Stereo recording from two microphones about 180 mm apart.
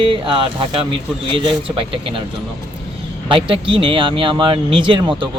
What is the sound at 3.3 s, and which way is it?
Speech, 30° right (ahead or behind).